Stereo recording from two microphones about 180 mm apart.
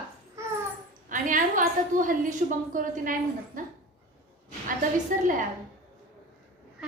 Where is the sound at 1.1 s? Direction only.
50° right (ahead or behind).